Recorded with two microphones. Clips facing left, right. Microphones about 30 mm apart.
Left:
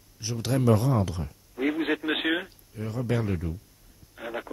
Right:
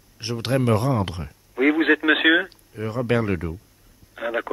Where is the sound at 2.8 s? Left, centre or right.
Right.